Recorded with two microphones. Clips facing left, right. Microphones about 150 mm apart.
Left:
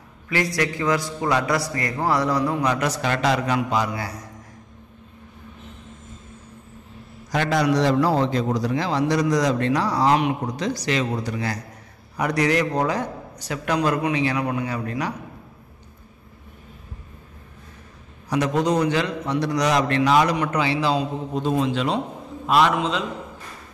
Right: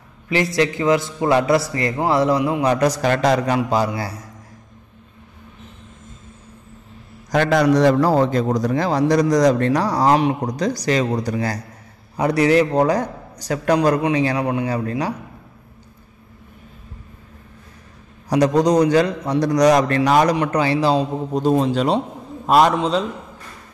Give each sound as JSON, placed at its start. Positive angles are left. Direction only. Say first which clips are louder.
{"t": 0.6, "sound": "a man's voice", "louder": "right 7 dB", "side_deg": -25}
{"t": 2.6, "sound": "a man's voice", "louder": "right 5 dB", "side_deg": -35}
{"t": 7.2, "sound": "a man's voice", "louder": "right 5 dB", "side_deg": -45}
{"t": 18.3, "sound": "a man's voice", "louder": "right 6 dB", "side_deg": -35}